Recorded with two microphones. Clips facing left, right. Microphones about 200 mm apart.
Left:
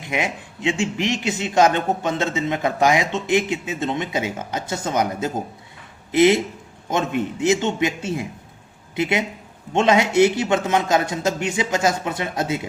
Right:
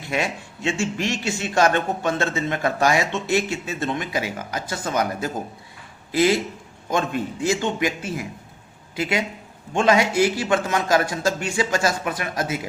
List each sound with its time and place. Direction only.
0.1 s a man's voice: 15° left (ahead or behind)